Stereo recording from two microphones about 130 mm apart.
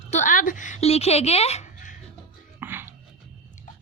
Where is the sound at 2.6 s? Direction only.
15° right (ahead or behind).